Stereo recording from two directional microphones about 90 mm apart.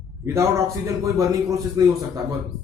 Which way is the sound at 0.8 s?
35° right (ahead or behind).